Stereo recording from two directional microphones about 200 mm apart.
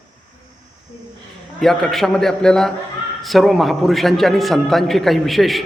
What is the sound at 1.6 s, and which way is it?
A man's voice, centre (ahead or behind).